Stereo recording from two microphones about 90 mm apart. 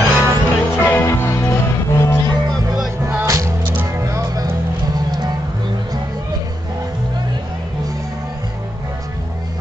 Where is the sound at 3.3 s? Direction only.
35° right (ahead or behind).